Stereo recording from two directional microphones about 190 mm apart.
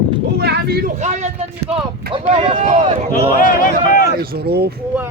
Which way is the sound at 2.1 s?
30° right (ahead or behind).